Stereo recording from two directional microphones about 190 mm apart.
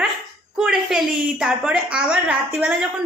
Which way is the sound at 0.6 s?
Centre (ahead or behind).